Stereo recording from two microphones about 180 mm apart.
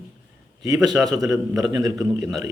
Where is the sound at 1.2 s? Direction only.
15° right (ahead or behind).